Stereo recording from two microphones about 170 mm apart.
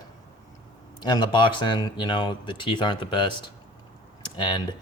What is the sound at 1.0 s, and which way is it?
Speech, 25° left (ahead or behind).